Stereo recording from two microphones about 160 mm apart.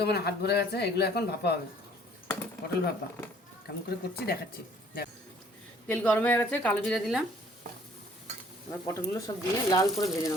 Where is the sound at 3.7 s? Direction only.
90° left.